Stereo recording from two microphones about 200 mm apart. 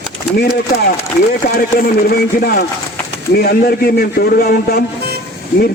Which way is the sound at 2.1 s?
50° left (ahead or behind).